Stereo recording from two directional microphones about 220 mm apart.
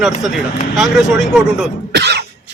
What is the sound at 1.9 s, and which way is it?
Cough, 50° right (ahead or behind).